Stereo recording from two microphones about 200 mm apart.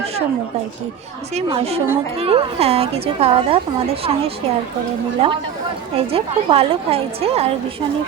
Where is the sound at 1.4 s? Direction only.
30° right (ahead or behind).